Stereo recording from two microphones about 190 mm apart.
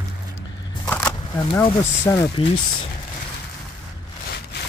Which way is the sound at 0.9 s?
10° left (ahead or behind).